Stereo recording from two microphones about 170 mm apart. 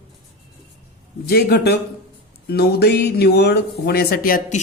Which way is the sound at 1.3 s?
70° left (ahead or behind).